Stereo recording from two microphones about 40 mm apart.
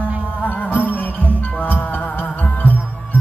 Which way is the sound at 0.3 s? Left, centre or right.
Left.